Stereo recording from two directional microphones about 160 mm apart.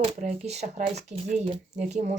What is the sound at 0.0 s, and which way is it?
Speech, 45° right (ahead or behind).